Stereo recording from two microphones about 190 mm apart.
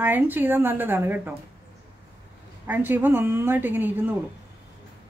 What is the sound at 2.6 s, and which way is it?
A woman's voice, 10° right (ahead or behind).